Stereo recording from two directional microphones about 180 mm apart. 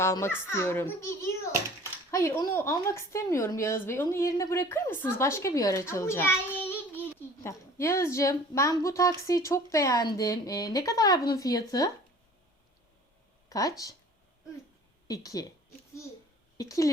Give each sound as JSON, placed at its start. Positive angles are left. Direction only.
{"t": 0.0, "sound": "a woman's voice", "side_deg": 15}
{"t": 13.5, "sound": "speech", "side_deg": 20}
{"t": 15.0, "sound": "speech", "side_deg": 20}
{"t": 16.6, "sound": "speech", "side_deg": 20}